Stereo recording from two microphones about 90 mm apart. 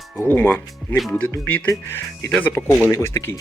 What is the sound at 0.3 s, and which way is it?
Speech, 20° left (ahead or behind).